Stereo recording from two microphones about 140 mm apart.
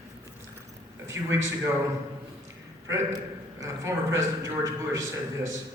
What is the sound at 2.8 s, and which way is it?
A man's voice, 20° right (ahead or behind).